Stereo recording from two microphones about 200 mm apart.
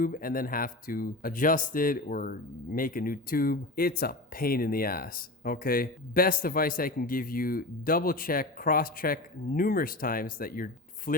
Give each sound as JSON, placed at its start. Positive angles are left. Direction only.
{"t": 0.0, "sound": "speech", "side_deg": 45}